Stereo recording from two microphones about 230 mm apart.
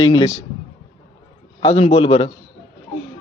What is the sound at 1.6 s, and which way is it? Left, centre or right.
Speech, left.